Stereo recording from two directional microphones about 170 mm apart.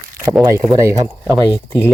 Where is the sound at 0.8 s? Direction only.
15° right (ahead or behind).